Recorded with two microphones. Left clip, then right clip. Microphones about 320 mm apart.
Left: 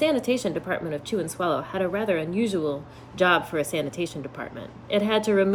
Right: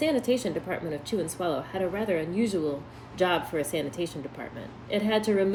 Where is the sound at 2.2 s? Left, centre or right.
Centre.